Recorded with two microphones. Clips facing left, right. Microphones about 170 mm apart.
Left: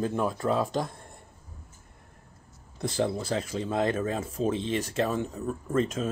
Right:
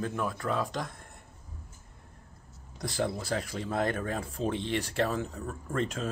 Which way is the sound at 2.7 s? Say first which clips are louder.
Left 4 dB; 25° left (ahead or behind).